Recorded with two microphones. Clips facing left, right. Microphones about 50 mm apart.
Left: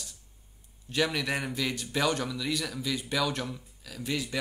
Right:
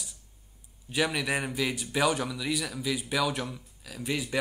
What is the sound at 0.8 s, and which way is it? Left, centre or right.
A man's voice, centre.